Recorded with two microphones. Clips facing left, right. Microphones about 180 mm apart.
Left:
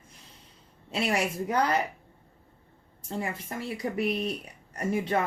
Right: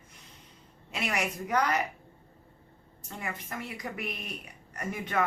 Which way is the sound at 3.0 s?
30° left (ahead or behind).